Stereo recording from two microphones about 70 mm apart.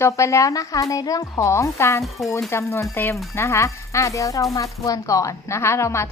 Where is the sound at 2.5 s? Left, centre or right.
Left.